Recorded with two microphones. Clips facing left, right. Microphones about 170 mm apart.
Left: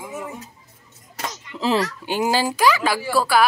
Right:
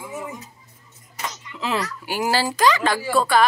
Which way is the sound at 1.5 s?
30° left (ahead or behind).